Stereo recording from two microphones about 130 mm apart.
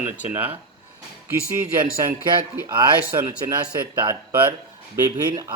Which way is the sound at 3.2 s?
25° right (ahead or behind).